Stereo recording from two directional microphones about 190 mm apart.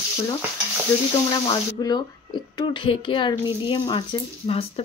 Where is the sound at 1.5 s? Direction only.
20° left (ahead or behind).